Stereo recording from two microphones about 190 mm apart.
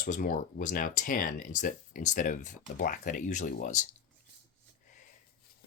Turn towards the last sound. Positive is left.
turn(degrees=45)  # may be behind; listen again after turning